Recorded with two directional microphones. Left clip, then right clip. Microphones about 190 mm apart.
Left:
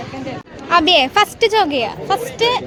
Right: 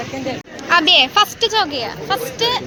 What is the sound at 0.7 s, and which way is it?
A woman's voice, 35° left (ahead or behind).